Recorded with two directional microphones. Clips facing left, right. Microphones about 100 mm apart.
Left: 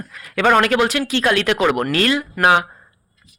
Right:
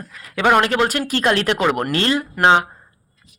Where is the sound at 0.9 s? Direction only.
40° right (ahead or behind); by 2.6 s 25° right (ahead or behind).